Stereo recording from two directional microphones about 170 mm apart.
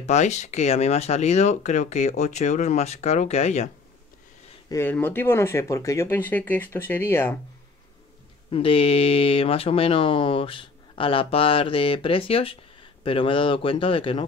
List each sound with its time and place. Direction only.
0.0 s speech: 40° left (ahead or behind)
4.6 s speech: 15° left (ahead or behind)
8.5 s speech: 35° left (ahead or behind)